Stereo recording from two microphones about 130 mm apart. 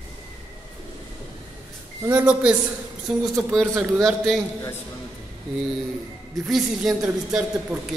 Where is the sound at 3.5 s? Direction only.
Centre (ahead or behind).